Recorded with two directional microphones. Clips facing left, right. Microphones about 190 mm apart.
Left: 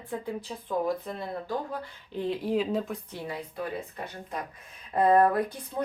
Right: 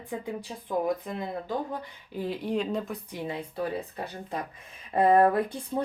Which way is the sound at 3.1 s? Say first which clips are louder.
Right 3 dB; 15° right (ahead or behind).